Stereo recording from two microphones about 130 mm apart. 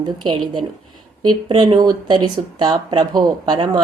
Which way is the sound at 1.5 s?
35° right (ahead or behind).